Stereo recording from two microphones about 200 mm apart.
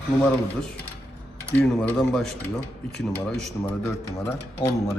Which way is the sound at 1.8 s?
5° left (ahead or behind).